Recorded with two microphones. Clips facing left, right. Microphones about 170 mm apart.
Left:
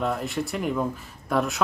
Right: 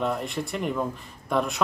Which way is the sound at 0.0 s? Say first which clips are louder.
Left 1 dB; centre (ahead or behind).